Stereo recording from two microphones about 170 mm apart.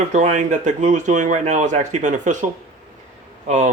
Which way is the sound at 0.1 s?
45° right (ahead or behind).